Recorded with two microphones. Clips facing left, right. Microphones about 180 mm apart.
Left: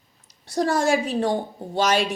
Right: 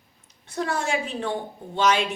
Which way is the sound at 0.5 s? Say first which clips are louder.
Left 6 dB; 40° left (ahead or behind).